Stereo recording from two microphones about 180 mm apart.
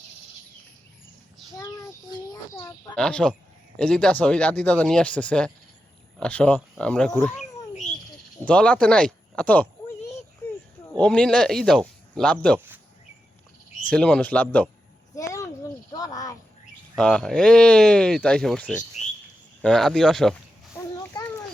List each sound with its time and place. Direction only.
2.3 s speech: 20° left (ahead or behind)
2.9 s speech: 5° left (ahead or behind)
8.4 s speech: 5° left (ahead or behind)
10.4 s a sound: 15° left (ahead or behind)
11.0 s speech: 5° left (ahead or behind)
12.5 s speech: 10° right (ahead or behind)
13.9 s speech: 5° left (ahead or behind)
15.1 s a sound: 15° left (ahead or behind)
16.9 s speech: 5° left (ahead or behind)
21.0 s a sound: 15° left (ahead or behind)